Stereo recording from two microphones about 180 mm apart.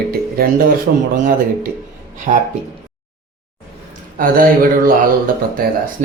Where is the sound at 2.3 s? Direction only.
35° right (ahead or behind).